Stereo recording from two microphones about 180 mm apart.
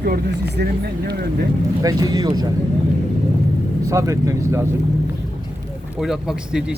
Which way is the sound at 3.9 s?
15° right (ahead or behind).